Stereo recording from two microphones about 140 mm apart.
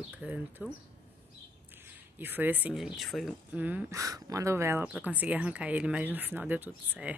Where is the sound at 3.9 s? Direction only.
25° right (ahead or behind).